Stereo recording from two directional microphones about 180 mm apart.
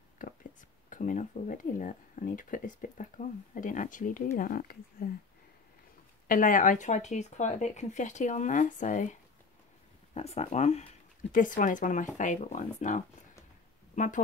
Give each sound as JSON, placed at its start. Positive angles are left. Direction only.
{"t": 0.2, "sound": "speech", "side_deg": 50}
{"t": 6.2, "sound": "speech", "side_deg": 50}
{"t": 10.1, "sound": "a woman's voice", "side_deg": 35}